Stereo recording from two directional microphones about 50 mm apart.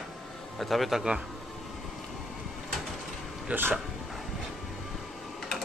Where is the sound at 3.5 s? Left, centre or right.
Right.